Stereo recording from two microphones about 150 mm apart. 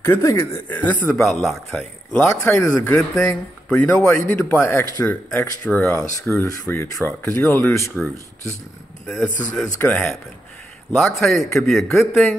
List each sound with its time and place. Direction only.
0.0 s speech: 15° left (ahead or behind)
2.1 s speech: 15° left (ahead or behind)
5.9 s speech: 20° left (ahead or behind)
9.0 s a man's voice: 5° left (ahead or behind)
11.1 s a man's voice: centre (ahead or behind)